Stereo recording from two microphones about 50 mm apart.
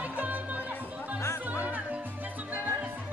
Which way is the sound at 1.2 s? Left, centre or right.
Left.